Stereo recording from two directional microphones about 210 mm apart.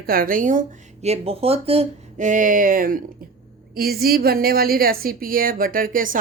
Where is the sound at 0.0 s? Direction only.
45° right (ahead or behind).